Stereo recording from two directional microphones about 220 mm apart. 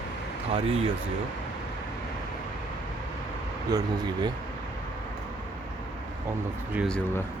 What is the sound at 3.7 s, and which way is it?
Speech, 15° right (ahead or behind).